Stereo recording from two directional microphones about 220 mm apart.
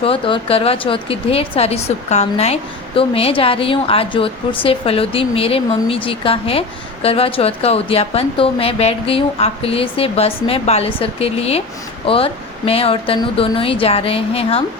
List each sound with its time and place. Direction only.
0.0 s a woman's voice: 25° left (ahead or behind)